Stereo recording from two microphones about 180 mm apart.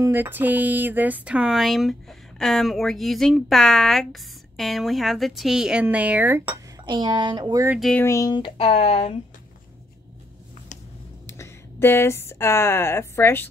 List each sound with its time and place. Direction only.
0.0 s speech: 10° right (ahead or behind)
6.9 s speech: 25° right (ahead or behind)
7.9 s speech: 15° left (ahead or behind); by 9.1 s 35° left (ahead or behind)
11.3 s speech: 15° left (ahead or behind)